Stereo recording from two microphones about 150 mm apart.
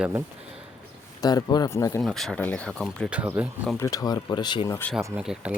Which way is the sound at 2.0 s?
Centre (ahead or behind).